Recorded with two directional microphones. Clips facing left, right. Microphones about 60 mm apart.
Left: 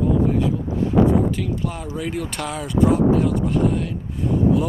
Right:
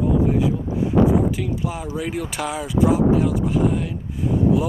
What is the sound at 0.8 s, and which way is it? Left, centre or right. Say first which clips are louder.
Speech: even; centre.